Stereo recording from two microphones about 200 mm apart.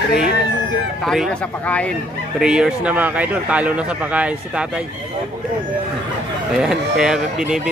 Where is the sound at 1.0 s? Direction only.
Centre (ahead or behind).